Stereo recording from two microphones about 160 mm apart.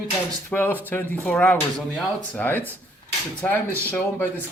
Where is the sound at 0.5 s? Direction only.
10° left (ahead or behind).